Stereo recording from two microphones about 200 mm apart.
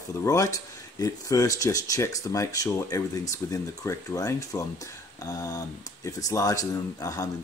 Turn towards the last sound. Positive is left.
turn(degrees=15)  # may be behind; listen again after turning